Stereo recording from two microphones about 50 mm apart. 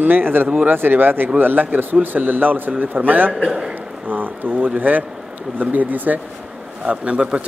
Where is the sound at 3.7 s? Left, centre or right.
Right.